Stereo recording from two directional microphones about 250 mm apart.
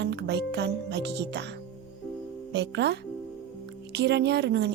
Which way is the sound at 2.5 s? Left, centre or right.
Right.